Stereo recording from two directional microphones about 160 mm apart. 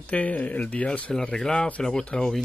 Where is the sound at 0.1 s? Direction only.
10° left (ahead or behind).